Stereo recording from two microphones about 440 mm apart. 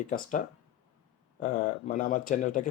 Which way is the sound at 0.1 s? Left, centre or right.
Centre.